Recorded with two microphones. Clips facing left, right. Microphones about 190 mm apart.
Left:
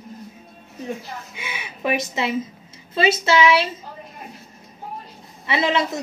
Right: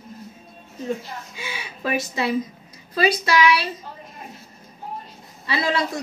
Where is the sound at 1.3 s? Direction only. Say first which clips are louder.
Even; 20° left (ahead or behind).